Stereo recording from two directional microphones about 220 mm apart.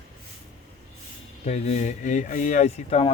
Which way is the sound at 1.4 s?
30° left (ahead or behind).